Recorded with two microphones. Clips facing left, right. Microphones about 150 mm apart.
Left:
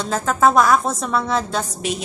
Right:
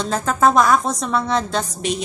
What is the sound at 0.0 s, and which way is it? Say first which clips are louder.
A woman's voice: even; 5° left (ahead or behind).